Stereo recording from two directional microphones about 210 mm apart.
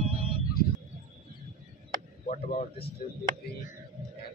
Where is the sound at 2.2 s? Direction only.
35° left (ahead or behind).